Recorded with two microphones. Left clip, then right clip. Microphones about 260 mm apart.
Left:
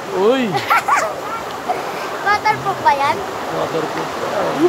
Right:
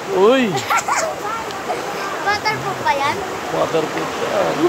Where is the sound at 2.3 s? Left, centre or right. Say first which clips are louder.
Left 5 dB; centre.